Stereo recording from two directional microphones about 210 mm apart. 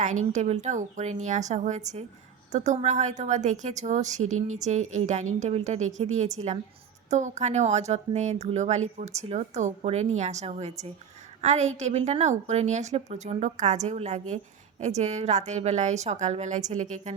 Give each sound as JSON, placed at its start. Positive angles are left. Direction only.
{"t": 0.0, "sound": "a woman's voice", "side_deg": -35}